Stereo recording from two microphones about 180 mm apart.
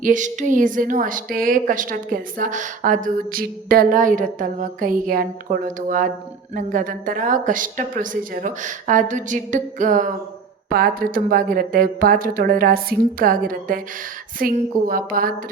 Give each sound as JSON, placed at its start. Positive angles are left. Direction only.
{"t": 0.0, "sound": "a woman's voice", "side_deg": -45}
{"t": 10.7, "sound": "a woman's voice", "side_deg": -55}